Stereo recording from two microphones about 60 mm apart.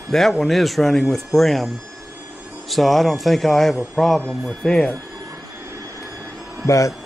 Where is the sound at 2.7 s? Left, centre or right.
Centre.